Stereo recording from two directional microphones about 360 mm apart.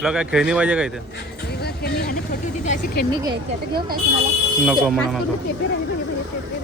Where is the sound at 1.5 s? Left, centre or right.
Left.